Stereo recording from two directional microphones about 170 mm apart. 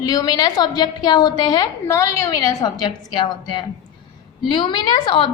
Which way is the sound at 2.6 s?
25° left (ahead or behind).